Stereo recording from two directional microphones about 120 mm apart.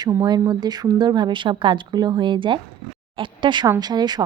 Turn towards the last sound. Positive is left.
turn(degrees=-35)  # may be behind; listen again after turning